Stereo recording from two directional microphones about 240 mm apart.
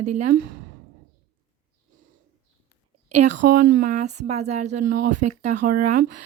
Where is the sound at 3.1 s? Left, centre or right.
Right.